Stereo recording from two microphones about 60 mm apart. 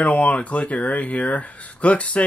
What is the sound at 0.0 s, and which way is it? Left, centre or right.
Speech, left.